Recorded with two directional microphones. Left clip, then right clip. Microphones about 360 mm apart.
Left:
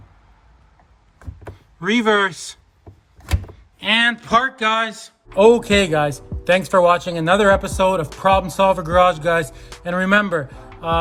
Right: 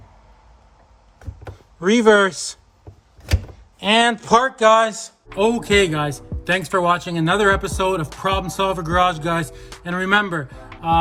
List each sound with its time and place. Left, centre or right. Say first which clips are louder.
1.5 s speech: right 3 dB; centre
3.8 s a man's voice: right 1 dB; centre
5.4 s speech: left 4 dB; centre